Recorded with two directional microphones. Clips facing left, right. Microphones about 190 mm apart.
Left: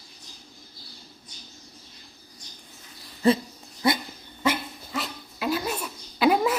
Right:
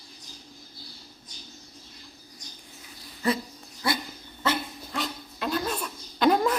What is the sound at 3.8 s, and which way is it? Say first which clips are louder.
Dog: left 5 dB; 20° left (ahead or behind).